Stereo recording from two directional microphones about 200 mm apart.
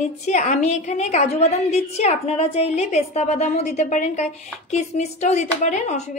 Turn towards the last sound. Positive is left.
turn(degrees=35)  # may be behind; listen again after turning